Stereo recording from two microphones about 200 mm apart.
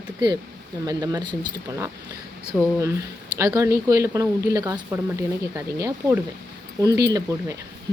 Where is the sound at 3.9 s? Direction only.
15° right (ahead or behind).